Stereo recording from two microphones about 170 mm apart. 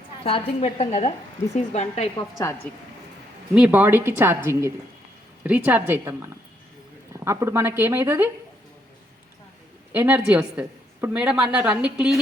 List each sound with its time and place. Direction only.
0.3 s a woman's voice: 35° left (ahead or behind)
3.5 s a woman's voice: 10° right (ahead or behind)
9.9 s a woman's voice: 10° right (ahead or behind)